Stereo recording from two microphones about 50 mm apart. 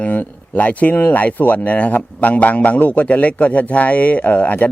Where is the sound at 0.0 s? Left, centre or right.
Left.